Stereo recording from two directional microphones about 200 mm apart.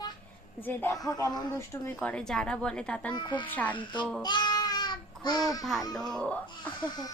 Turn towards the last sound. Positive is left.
turn(degrees=20)  # may be behind; listen again after turning